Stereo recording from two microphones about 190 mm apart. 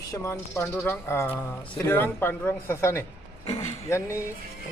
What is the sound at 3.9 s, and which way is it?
Speech, 15° left (ahead or behind).